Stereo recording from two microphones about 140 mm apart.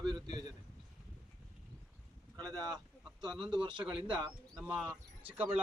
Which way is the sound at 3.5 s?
35° right (ahead or behind).